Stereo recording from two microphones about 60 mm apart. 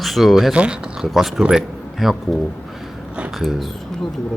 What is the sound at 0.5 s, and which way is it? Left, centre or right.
Speech, centre.